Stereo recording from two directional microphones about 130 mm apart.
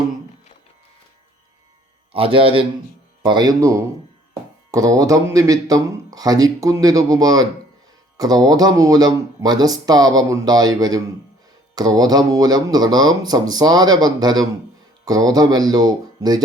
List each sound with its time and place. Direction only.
2.1 s a man's voice: 45° right (ahead or behind)
3.2 s speech: 30° right (ahead or behind)